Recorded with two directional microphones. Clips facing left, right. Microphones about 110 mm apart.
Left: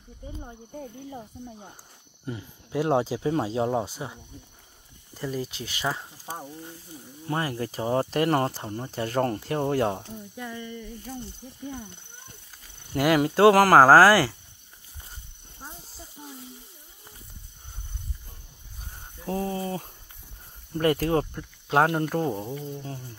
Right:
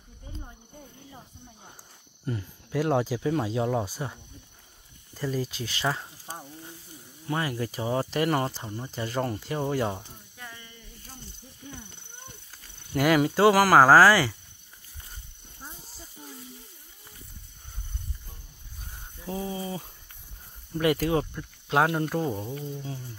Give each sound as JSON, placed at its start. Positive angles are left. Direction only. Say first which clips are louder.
{"t": 2.2, "sound": "a sound", "louder": "right 2 dB", "side_deg": 15}
{"t": 2.8, "sound": "speech", "louder": "left 1 dB", "side_deg": 25}
{"t": 5.1, "sound": "speech", "louder": "right 1 dB", "side_deg": 20}
{"t": 7.2, "sound": "speech", "louder": "left 1 dB", "side_deg": 35}
{"t": 12.9, "sound": "speech", "louder": "even", "side_deg": 25}
{"t": 13.5, "sound": "speech", "louder": "left 2 dB", "side_deg": 50}
{"t": 19.2, "sound": "speech", "louder": "left 4 dB", "side_deg": -5}
{"t": 20.7, "sound": "speech", "louder": "left 1 dB", "side_deg": 40}
{"t": 22.2, "sound": "a sound", "louder": "left 2 dB", "side_deg": 15}